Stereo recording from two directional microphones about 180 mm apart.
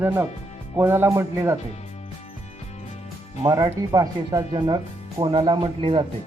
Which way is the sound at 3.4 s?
20° right (ahead or behind).